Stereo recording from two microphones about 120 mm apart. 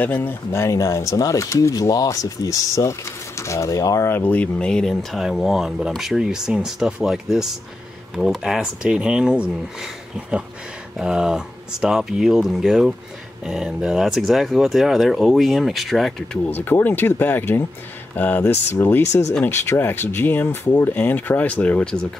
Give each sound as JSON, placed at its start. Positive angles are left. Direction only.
{"t": 0.0, "sound": "speech", "side_deg": 15}
{"t": 16.4, "sound": "speech", "side_deg": 15}